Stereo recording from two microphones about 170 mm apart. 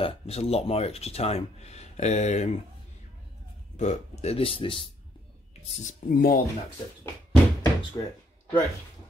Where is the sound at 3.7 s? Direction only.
45° left (ahead or behind).